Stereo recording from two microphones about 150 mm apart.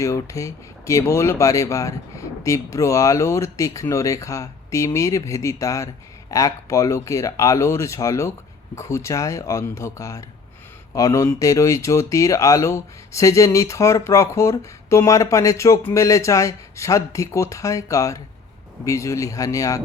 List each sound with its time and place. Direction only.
0.0 s speech: 20° left (ahead or behind)